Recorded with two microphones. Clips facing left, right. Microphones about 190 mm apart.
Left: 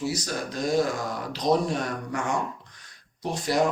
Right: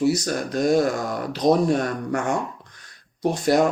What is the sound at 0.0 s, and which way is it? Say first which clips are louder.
Speech: right 8 dB; 55° right (ahead or behind).